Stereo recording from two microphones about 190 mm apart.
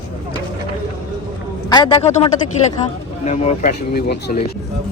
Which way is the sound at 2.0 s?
35° left (ahead or behind).